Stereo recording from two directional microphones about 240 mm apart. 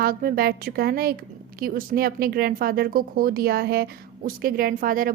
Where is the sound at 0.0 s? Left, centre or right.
Right.